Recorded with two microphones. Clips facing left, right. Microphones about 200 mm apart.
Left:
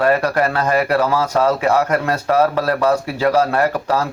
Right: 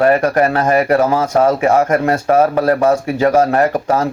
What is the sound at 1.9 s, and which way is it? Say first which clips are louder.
Speech: right 4 dB; 50° right (ahead or behind).